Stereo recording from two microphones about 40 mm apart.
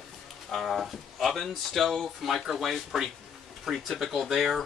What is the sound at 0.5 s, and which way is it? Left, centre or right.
Speech, centre.